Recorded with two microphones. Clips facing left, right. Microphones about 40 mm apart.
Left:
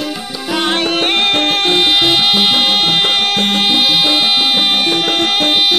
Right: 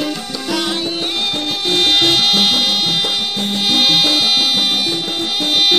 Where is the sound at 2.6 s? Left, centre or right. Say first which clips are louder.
Left 4 dB; left.